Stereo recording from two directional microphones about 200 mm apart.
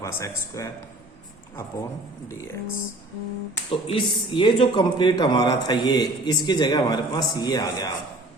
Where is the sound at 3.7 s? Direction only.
25° left (ahead or behind).